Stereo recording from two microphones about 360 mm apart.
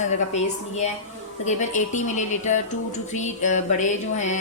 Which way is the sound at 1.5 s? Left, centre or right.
Centre.